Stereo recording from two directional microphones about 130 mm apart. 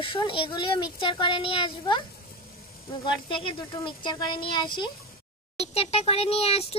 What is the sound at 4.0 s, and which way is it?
Speech, 35° left (ahead or behind).